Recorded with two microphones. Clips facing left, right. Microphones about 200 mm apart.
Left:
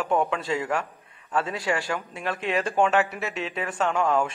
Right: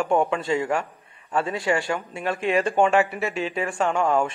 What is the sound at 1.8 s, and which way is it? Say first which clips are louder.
A man's voice: right 3 dB; 5° right (ahead or behind).